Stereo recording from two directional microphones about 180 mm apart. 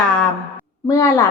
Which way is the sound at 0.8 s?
20° left (ahead or behind).